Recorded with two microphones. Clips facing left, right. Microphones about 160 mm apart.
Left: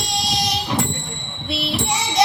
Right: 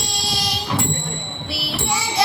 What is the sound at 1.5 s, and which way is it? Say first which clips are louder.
Child singing: left 5 dB; 20° left (ahead or behind).